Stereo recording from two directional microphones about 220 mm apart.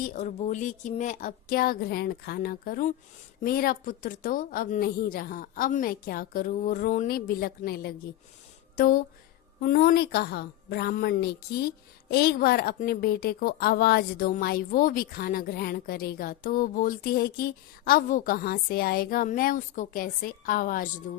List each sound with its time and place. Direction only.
0.0 s a woman's voice: 35° left (ahead or behind)